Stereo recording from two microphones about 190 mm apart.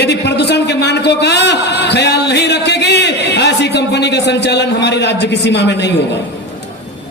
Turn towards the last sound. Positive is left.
turn(degrees=65)  # may be behind; listen again after turning